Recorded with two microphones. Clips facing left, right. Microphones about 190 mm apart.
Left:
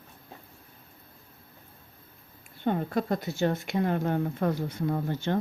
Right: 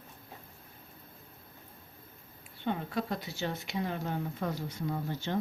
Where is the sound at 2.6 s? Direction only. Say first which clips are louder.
Left 6 dB; 50° left (ahead or behind).